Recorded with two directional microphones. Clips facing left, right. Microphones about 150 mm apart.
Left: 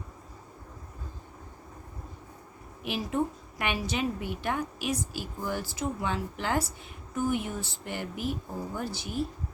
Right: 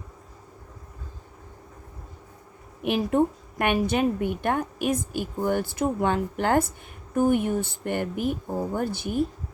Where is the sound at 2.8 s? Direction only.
55° right (ahead or behind).